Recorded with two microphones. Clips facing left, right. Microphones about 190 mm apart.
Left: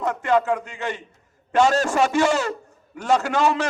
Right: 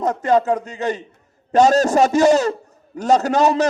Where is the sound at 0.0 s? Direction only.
40° right (ahead or behind).